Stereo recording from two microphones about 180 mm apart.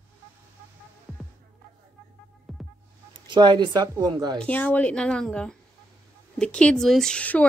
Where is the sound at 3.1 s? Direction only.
25° right (ahead or behind).